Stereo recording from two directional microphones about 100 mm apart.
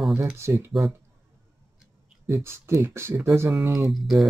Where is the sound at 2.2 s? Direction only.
25° right (ahead or behind).